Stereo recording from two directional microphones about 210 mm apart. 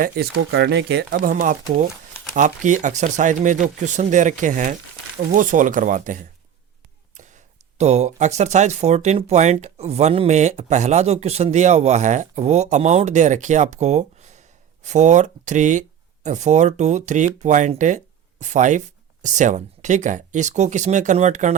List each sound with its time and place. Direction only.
0.0 s speech: 50° right (ahead or behind)